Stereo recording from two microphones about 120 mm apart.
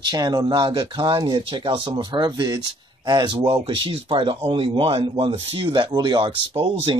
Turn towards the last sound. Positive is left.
turn(degrees=-50)  # may be behind; listen again after turning